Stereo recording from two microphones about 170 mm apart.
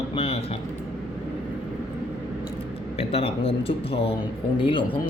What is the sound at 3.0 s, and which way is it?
Speech, 35° left (ahead or behind).